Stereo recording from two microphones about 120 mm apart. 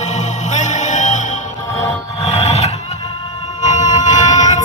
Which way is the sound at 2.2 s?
65° left (ahead or behind).